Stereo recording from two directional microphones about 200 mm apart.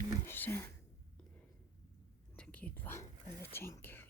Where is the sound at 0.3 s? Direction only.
10° left (ahead or behind).